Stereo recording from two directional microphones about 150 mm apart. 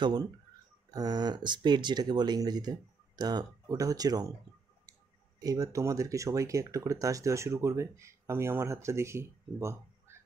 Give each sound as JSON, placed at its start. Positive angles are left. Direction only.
{"t": 0.0, "sound": "speech", "side_deg": -30}
{"t": 5.4, "sound": "speech", "side_deg": -20}